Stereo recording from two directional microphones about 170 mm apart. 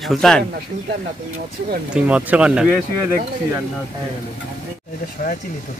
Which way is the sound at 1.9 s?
10° right (ahead or behind).